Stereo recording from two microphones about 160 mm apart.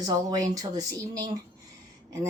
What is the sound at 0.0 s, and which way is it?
A woman's voice, 25° right (ahead or behind).